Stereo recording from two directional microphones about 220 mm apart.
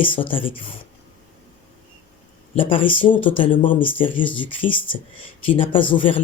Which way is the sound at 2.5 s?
25° left (ahead or behind).